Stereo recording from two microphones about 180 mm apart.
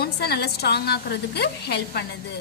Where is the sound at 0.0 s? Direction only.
65° left (ahead or behind).